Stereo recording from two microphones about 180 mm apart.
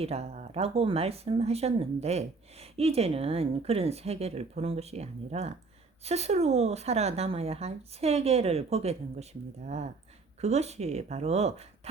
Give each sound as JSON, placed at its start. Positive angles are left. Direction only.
{"t": 0.0, "sound": "speech", "side_deg": -35}